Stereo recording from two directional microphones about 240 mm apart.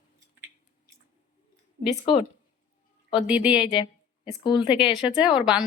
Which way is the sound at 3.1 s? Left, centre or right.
Centre.